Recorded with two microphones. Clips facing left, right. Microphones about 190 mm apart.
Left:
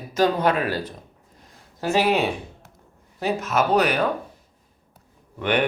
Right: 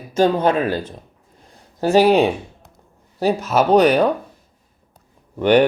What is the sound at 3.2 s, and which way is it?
Speech, 35° right (ahead or behind).